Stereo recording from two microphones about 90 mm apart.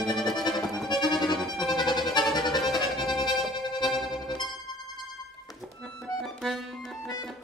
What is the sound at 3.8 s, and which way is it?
Music, centre (ahead or behind).